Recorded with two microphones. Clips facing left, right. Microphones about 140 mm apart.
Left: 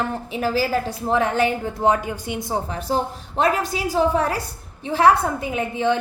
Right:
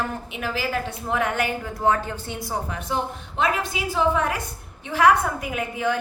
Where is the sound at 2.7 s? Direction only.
35° left (ahead or behind).